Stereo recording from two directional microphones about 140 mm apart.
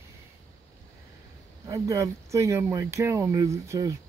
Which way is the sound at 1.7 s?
25° right (ahead or behind).